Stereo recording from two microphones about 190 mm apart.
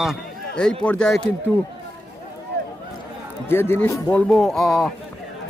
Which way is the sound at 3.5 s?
10° left (ahead or behind).